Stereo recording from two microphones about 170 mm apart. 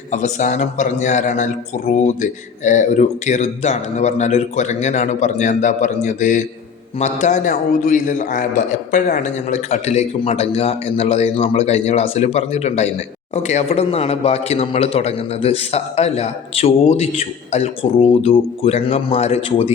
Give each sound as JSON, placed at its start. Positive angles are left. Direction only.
{"t": 0.1, "sound": "speech", "side_deg": 45}